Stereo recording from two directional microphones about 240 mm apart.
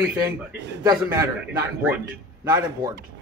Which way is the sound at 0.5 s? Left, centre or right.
Right.